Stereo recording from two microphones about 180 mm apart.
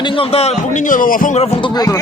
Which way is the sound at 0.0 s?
30° left (ahead or behind).